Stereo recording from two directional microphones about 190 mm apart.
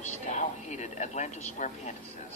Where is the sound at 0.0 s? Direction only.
40° left (ahead or behind).